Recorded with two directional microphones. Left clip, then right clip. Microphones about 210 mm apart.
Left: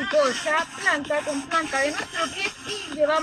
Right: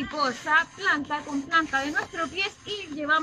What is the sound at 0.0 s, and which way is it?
Speech, 45° left (ahead or behind).